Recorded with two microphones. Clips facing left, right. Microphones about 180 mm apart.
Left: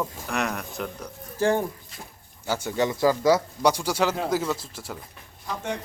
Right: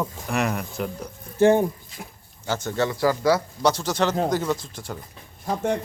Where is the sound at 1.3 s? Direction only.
20° right (ahead or behind).